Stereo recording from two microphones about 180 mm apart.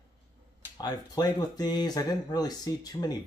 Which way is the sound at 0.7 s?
20° left (ahead or behind).